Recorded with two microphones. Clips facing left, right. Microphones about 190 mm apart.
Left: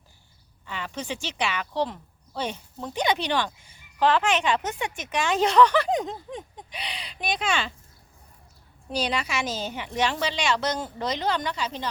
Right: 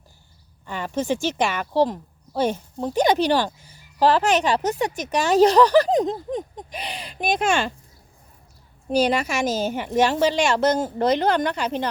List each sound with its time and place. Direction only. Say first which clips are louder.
0.6 s speech: right 8 dB; 45° right (ahead or behind)
8.9 s a woman's voice: right 8 dB; 45° right (ahead or behind)